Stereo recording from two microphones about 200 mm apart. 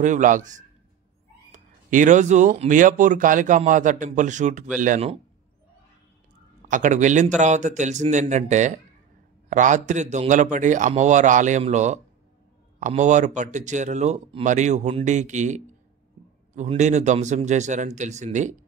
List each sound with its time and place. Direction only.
0.0 s speech: 40° right (ahead or behind)
6.7 s speech: 40° right (ahead or behind)